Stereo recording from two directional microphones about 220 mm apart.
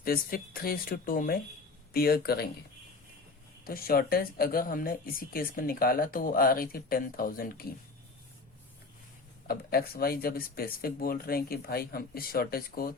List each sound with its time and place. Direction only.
0.0 s speech: 40° left (ahead or behind)
3.6 s speech: 40° left (ahead or behind)
9.5 s speech: 45° left (ahead or behind)